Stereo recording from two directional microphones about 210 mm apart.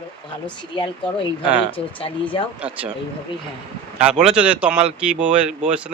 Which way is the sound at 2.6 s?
5° right (ahead or behind).